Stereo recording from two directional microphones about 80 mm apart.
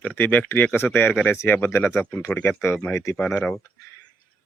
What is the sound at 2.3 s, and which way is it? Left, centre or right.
Speech, left.